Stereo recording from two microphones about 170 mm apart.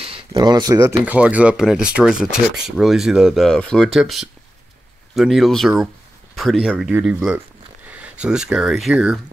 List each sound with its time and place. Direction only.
0.0 s speech: 30° right (ahead or behind); by 9.2 s 5° right (ahead or behind)